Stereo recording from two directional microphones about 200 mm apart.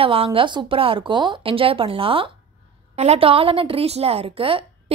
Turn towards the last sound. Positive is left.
turn(degrees=-25)  # may be behind; listen again after turning